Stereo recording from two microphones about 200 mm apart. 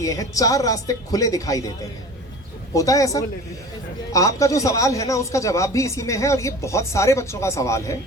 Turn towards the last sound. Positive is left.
turn(degrees=15)  # may be behind; listen again after turning